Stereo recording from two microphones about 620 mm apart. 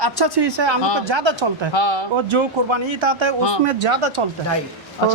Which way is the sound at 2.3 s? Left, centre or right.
Right.